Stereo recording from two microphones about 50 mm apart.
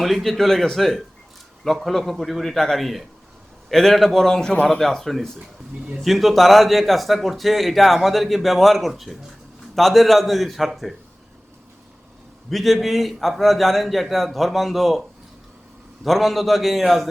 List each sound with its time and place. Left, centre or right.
0.0 s a man's voice: centre
5.4 s speech: centre
6.0 s a man's voice: centre
12.5 s a man's voice: centre
16.0 s a man's voice: centre